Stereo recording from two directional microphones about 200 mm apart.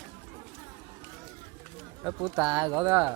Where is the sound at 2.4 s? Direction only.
20° right (ahead or behind).